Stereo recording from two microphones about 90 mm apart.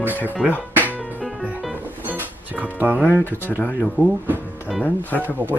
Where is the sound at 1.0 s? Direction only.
Centre (ahead or behind).